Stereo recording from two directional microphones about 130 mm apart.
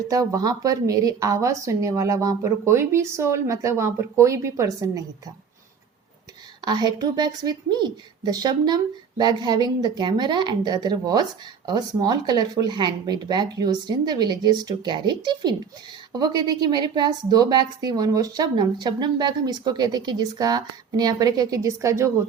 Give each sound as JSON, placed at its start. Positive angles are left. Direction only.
{"t": 0.1, "sound": "speech", "side_deg": -25}
{"t": 6.7, "sound": "a woman's voice", "side_deg": -30}